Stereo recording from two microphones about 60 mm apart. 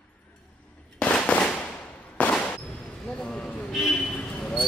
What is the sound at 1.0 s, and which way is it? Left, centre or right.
Firecracker, centre.